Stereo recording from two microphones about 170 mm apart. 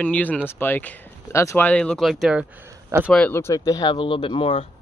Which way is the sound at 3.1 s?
10° left (ahead or behind).